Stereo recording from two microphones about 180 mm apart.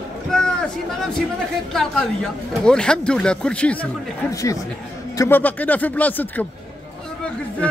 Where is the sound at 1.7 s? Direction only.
Centre (ahead or behind).